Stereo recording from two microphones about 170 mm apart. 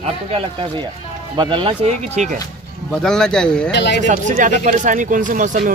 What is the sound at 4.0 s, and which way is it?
A man's voice, 50° right (ahead or behind).